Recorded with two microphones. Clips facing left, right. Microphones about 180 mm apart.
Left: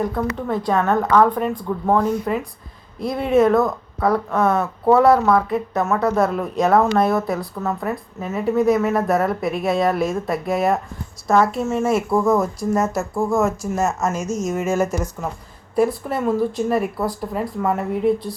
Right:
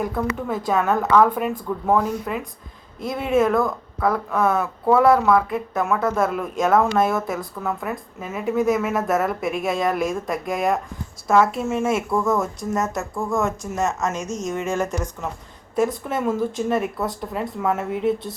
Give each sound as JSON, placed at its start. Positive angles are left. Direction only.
{"t": 0.0, "sound": "a woman's voice", "side_deg": -5}
{"t": 3.5, "sound": "speech", "side_deg": 20}
{"t": 4.0, "sound": "a woman's voice", "side_deg": 0}
{"t": 16.0, "sound": "a woman's voice", "side_deg": 0}